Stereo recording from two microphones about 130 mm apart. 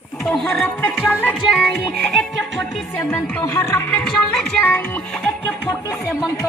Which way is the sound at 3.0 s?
15° left (ahead or behind).